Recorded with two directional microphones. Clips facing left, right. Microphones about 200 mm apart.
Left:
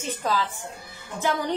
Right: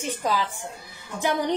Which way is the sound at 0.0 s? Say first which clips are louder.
Right 1 dB; 15° right (ahead or behind).